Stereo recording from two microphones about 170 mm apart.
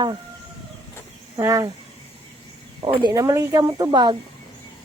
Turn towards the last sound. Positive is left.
turn(degrees=-25)  # may be behind; listen again after turning